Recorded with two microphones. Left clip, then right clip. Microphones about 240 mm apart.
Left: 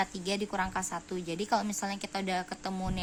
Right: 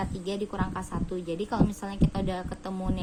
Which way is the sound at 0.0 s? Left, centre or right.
Left.